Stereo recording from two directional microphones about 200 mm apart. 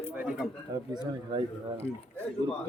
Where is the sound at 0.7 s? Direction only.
20° right (ahead or behind).